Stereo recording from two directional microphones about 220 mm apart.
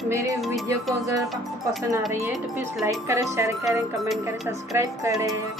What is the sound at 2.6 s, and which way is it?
Speech, 10° right (ahead or behind).